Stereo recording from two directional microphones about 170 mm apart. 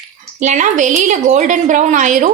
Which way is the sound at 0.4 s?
45° right (ahead or behind).